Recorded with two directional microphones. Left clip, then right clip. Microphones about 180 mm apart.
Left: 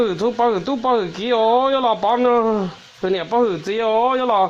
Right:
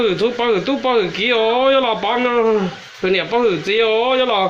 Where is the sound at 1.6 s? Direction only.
5° left (ahead or behind).